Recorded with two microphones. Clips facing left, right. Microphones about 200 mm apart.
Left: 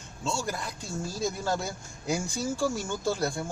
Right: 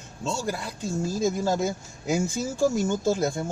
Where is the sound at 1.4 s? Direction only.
20° right (ahead or behind).